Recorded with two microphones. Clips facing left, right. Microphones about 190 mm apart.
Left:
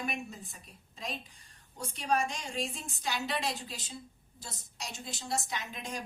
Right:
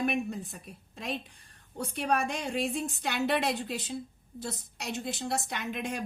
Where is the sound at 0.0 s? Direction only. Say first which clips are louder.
Right 8 dB; 60° right (ahead or behind).